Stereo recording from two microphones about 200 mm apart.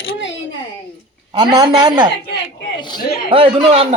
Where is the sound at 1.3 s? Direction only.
25° right (ahead or behind).